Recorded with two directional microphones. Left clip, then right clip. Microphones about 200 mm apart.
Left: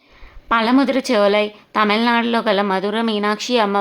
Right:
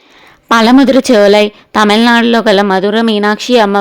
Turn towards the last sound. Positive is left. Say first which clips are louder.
# right 9 dB
turn(degrees=-35)  # may be behind; listen again after turning